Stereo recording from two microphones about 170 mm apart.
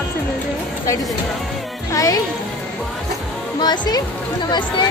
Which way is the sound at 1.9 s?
20° left (ahead or behind).